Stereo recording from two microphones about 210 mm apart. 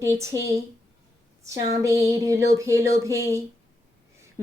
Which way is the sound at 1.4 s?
15° right (ahead or behind).